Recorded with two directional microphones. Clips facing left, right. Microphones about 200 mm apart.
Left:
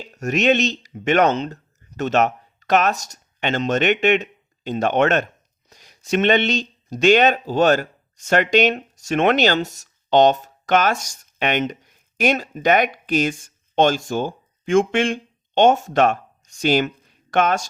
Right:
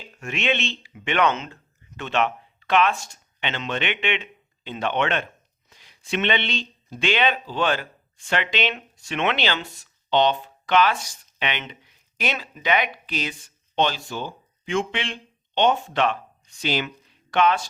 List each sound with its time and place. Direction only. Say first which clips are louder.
0.0 s speech: left 9 dB; 40° left (ahead or behind)